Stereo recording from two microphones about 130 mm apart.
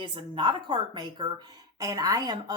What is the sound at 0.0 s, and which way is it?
Speech, 40° right (ahead or behind).